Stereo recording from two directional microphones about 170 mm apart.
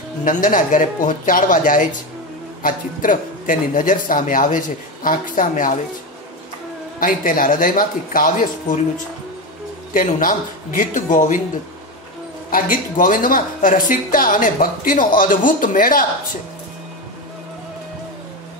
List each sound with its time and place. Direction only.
0.2 s speech: 50° left (ahead or behind)
7.0 s speech: 55° left (ahead or behind)
9.9 s speech: 50° left (ahead or behind)
12.4 s speech: 55° left (ahead or behind)